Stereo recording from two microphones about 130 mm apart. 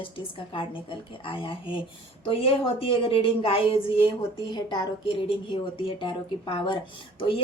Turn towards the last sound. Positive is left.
turn(degrees=40)  # may be behind; listen again after turning